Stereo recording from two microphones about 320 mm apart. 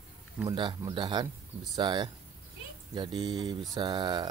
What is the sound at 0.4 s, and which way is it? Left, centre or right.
Speech, centre.